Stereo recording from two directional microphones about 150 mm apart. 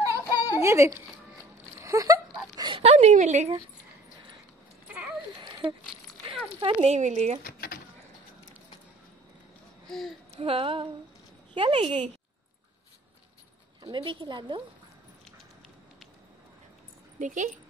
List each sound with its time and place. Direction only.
0.0 s a sound: 20° right (ahead or behind)
2.5 s dog: 30° right (ahead or behind)
2.8 s speech: 45° right (ahead or behind)
5.4 s a sound: 30° right (ahead or behind)
6.9 s speech: 50° right (ahead or behind)
7.4 s a sound: 80° left
9.8 s speech: centre (ahead or behind)
10.3 s speech: 40° right (ahead or behind)
13.8 s speech: 35° right (ahead or behind)
17.2 s speech: 55° right (ahead or behind)